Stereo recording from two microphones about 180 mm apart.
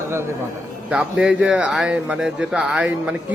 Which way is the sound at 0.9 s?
5° right (ahead or behind).